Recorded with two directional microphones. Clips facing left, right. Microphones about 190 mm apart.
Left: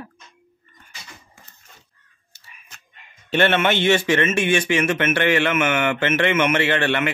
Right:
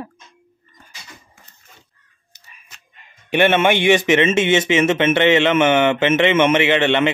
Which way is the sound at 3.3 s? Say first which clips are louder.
Right 3 dB; 15° right (ahead or behind).